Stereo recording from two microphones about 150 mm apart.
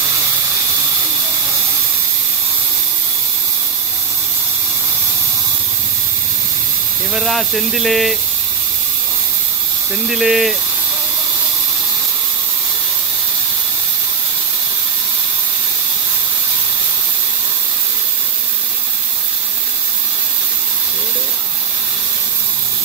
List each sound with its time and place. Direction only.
7.2 s speech: centre (ahead or behind)
10.0 s speech: centre (ahead or behind)